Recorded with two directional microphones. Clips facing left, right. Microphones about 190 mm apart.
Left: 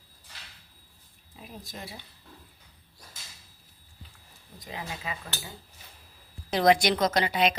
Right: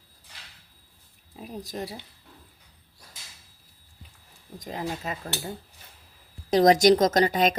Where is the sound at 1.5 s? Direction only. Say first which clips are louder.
Right 8 dB; 40° right (ahead or behind).